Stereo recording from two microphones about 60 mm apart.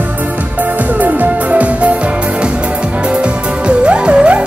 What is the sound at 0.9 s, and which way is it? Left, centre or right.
Music, right.